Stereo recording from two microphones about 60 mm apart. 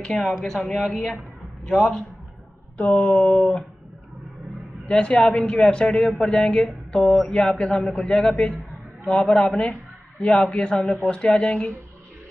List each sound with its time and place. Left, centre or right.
0.0 s speech: centre
2.8 s a sound: left
3.3 s speech: centre
4.8 s speech: centre